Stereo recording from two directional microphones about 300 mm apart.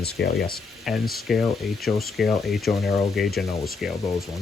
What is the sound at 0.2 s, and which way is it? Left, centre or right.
Speech, left.